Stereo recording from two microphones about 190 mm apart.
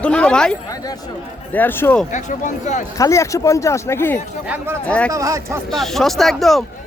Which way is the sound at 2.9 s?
15° left (ahead or behind).